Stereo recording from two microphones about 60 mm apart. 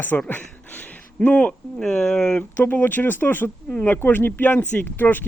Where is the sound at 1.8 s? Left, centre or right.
Centre.